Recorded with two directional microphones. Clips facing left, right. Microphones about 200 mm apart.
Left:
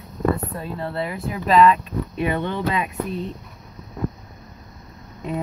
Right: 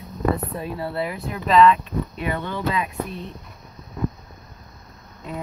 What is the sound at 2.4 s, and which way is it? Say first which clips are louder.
Speech: left 2 dB; 20° left (ahead or behind).